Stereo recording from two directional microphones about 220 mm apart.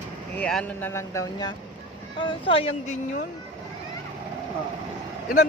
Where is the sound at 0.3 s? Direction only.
5° left (ahead or behind); by 2.7 s 25° left (ahead or behind).